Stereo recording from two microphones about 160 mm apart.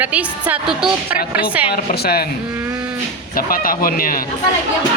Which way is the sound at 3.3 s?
60° left (ahead or behind).